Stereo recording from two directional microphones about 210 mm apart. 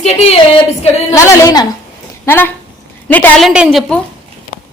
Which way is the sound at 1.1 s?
15° left (ahead or behind).